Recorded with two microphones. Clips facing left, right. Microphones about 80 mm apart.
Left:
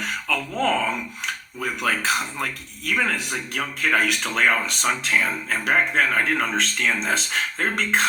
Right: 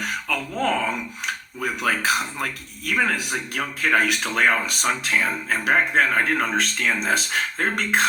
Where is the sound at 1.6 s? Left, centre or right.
Centre.